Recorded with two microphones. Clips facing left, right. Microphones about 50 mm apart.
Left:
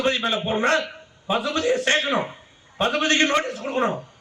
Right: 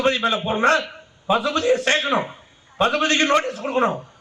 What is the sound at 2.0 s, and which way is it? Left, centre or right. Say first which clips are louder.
Speech: right 2 dB; right.